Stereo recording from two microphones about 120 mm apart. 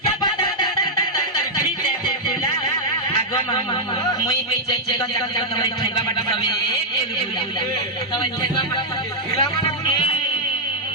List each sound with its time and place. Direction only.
0.2 s music: 35° left (ahead or behind)
2.0 s music: 40° left (ahead or behind)
4.9 s a man's voice: 40° left (ahead or behind)
8.1 s a man's voice: 40° left (ahead or behind)